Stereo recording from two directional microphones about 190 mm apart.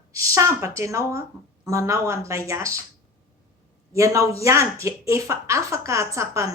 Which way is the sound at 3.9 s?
15° right (ahead or behind).